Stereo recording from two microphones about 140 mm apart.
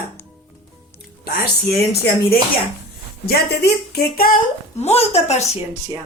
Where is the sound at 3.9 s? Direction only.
90° left.